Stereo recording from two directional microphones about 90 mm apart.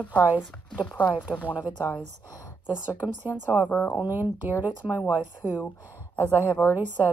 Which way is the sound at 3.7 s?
20° left (ahead or behind).